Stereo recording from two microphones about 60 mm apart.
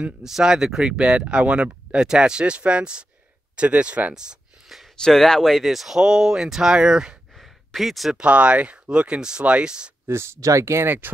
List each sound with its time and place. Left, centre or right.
0.2 s speech: centre
4.1 s a sound: centre
4.9 s speech: centre
7.3 s a sound: centre
8.2 s speech: right
10.0 s speech: right